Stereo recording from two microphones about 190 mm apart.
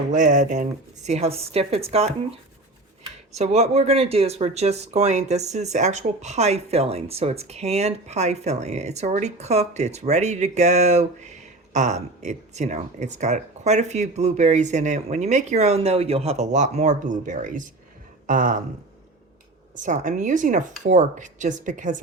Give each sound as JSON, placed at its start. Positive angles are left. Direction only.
{"t": 0.1, "sound": "speech", "side_deg": -40}
{"t": 3.3, "sound": "speech", "side_deg": -35}
{"t": 19.7, "sound": "speech", "side_deg": -40}